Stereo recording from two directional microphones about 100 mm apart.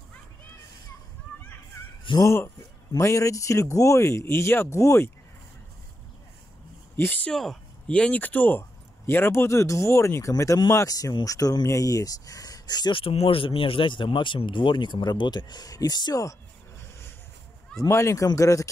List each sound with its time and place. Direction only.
2.2 s speech: 25° left (ahead or behind)
7.2 s speech: 5° left (ahead or behind); by 12.9 s 45° left (ahead or behind)
12.9 s speech: 70° left (ahead or behind); by 16.3 s 40° left (ahead or behind)
17.8 s speech: 30° left (ahead or behind)